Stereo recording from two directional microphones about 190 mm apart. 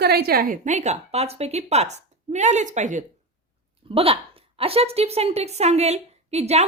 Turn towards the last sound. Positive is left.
turn(degrees=-35)  # may be behind; listen again after turning